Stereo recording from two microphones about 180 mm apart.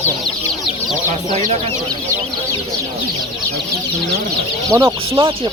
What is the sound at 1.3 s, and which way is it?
Speech, 40° right (ahead or behind).